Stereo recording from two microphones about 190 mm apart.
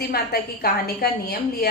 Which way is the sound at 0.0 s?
55° left (ahead or behind).